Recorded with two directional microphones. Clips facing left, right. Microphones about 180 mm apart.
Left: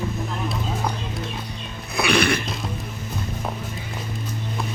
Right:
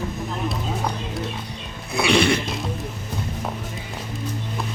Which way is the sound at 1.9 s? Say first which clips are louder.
Right 2 dB; 25° right (ahead or behind).